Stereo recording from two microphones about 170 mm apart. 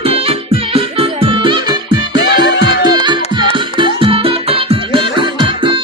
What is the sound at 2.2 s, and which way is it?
Music, 90° left.